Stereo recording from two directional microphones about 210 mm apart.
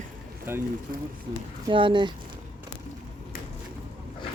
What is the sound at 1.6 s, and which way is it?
Speech, 25° right (ahead or behind).